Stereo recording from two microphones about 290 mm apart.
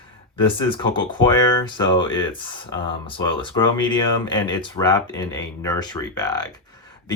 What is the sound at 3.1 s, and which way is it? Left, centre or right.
Speech, centre.